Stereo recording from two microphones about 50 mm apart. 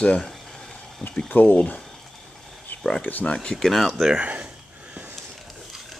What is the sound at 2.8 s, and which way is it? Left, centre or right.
Speech, centre.